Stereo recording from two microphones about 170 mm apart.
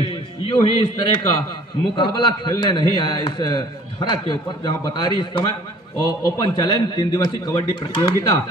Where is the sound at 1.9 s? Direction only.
25° left (ahead or behind).